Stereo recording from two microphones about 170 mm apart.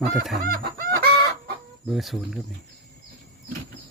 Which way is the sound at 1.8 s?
Centre (ahead or behind).